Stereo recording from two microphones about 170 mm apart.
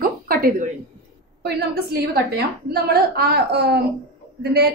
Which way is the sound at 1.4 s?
70° right (ahead or behind).